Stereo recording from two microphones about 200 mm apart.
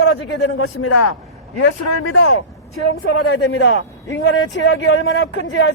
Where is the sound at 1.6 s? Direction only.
70° left (ahead or behind).